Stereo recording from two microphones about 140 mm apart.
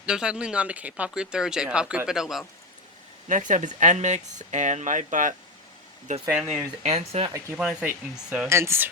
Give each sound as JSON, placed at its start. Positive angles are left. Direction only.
{"t": 0.0, "sound": "speech", "side_deg": -5}
{"t": 3.2, "sound": "speech", "side_deg": -65}
{"t": 6.8, "sound": "speech", "side_deg": -50}
{"t": 7.5, "sound": "speech", "side_deg": -5}
{"t": 8.1, "sound": "mechanisms", "side_deg": -5}
{"t": 8.4, "sound": "speech", "side_deg": -20}